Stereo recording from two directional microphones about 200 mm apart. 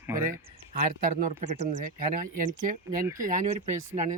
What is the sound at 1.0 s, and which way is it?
Speech, 45° right (ahead or behind).